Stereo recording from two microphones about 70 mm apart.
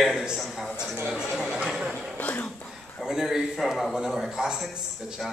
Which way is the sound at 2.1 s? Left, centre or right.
Left.